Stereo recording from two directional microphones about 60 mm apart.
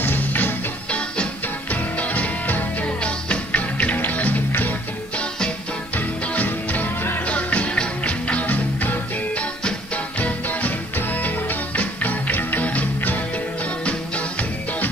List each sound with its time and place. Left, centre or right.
0.0 s music: left
3.7 s music: left